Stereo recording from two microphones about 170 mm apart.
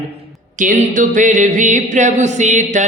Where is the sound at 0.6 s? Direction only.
50° right (ahead or behind).